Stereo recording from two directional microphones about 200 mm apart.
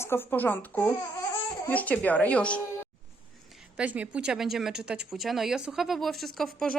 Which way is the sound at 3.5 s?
5° right (ahead or behind).